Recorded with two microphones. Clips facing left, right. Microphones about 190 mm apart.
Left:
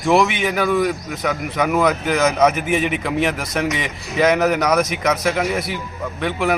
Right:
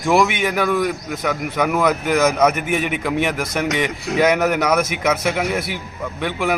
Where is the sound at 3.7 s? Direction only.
65° right (ahead or behind).